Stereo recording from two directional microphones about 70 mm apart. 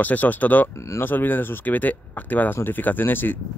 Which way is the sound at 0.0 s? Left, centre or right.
Left.